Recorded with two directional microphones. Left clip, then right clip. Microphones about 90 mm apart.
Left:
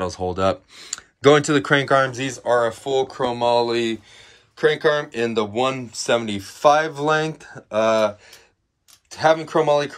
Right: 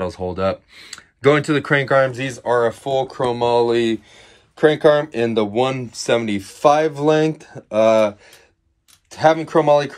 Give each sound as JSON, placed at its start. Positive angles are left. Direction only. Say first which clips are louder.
{"t": 0.0, "sound": "speech", "louder": "even", "side_deg": 40}
{"t": 2.4, "sound": "speech", "louder": "right 2 dB", "side_deg": 30}
{"t": 4.2, "sound": "speech", "louder": "right 4 dB", "side_deg": 0}
{"t": 5.8, "sound": "speech", "louder": "right 2 dB", "side_deg": 30}
{"t": 9.1, "sound": "speech", "louder": "right 3 dB", "side_deg": 15}